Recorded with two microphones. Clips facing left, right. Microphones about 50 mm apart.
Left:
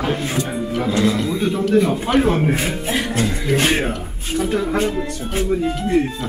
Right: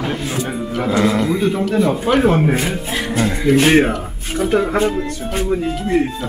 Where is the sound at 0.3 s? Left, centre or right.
Centre.